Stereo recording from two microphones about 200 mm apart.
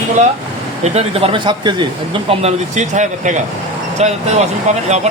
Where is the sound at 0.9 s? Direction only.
30° right (ahead or behind).